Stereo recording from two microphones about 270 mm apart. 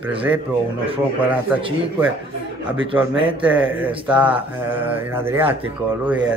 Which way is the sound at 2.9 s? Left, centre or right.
Centre.